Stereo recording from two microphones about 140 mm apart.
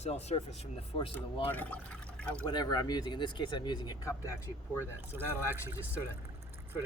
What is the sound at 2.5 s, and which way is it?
Speech, 30° left (ahead or behind).